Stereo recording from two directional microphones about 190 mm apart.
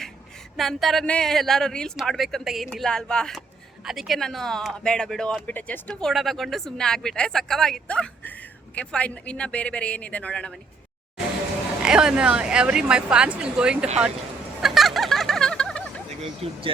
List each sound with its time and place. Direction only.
0.5 s speech: centre (ahead or behind)
11.8 s speech: 5° right (ahead or behind)
14.6 s a sound: centre (ahead or behind)
16.0 s speech: 30° right (ahead or behind)